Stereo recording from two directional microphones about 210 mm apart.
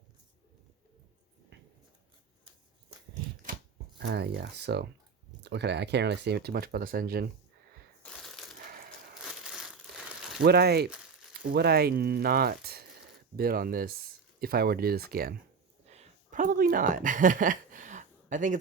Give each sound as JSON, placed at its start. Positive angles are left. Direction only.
{"t": 4.0, "sound": "speech", "side_deg": -55}
{"t": 8.0, "sound": "crushing", "side_deg": 5}
{"t": 9.2, "sound": "crumpling", "side_deg": -5}
{"t": 10.4, "sound": "speech", "side_deg": -50}
{"t": 15.9, "sound": "a sound", "side_deg": -35}